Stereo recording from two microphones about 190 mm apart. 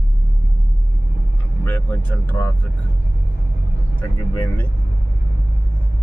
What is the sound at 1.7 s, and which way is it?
Speech, 10° left (ahead or behind).